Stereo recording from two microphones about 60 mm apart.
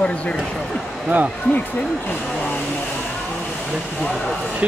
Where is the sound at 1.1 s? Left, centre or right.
Right.